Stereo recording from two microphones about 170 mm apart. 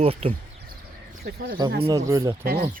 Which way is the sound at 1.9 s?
20° right (ahead or behind).